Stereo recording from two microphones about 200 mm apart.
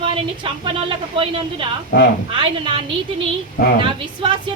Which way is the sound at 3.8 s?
25° right (ahead or behind).